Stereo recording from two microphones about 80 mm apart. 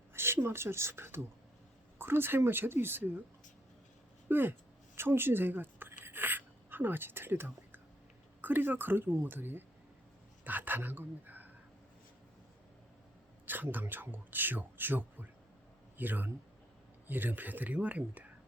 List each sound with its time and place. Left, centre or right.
0.1 s speech: right
4.3 s speech: right
4.9 s a sound: right
8.4 s speech: right
13.4 s speech: right